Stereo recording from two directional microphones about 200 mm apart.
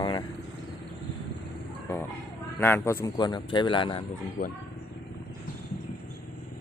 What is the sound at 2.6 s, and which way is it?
Speech, 10° left (ahead or behind).